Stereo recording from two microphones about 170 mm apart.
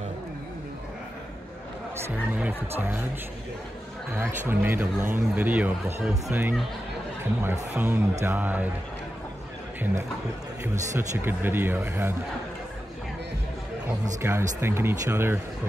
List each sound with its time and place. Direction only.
2.0 s speech: 10° right (ahead or behind)
4.1 s speech: 15° right (ahead or behind)
10.6 s speech: 15° right (ahead or behind)
14.2 s speech: 15° right (ahead or behind)